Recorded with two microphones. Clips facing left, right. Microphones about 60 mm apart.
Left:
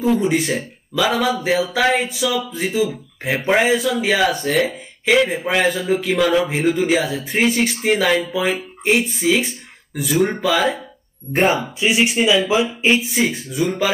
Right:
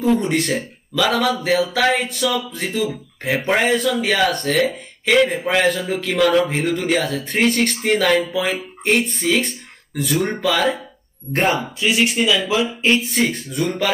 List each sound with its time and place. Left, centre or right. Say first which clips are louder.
0.0 s speech: left 1 dB; centre